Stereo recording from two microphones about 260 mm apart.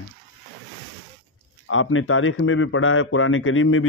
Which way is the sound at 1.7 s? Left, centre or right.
Left.